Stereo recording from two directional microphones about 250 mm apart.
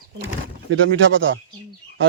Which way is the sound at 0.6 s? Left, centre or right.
Right.